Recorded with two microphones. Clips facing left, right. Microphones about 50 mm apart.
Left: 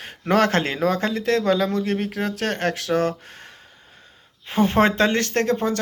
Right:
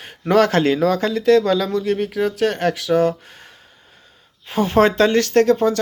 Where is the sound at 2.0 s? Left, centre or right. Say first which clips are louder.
Right 6 dB; left.